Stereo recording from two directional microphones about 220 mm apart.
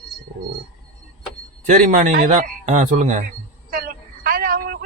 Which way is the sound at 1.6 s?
35° right (ahead or behind).